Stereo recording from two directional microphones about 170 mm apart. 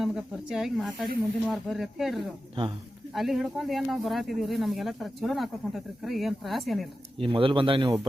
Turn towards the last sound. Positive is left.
turn(degrees=-30)  # may be behind; listen again after turning